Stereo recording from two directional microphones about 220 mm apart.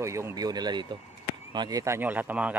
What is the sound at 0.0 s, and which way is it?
Speech, 15° right (ahead or behind).